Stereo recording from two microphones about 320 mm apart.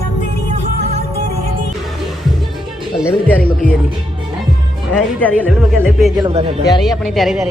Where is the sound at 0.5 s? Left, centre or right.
Right.